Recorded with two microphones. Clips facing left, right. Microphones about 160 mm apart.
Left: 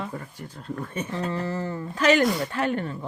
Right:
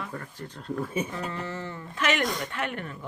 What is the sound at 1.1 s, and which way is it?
Speech, 35° left (ahead or behind).